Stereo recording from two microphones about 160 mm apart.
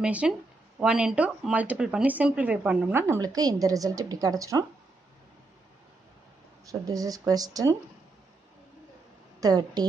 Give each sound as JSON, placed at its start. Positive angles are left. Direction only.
{"t": 0.0, "sound": "speech", "side_deg": -5}
{"t": 6.6, "sound": "speech", "side_deg": -20}
{"t": 9.4, "sound": "speech", "side_deg": -25}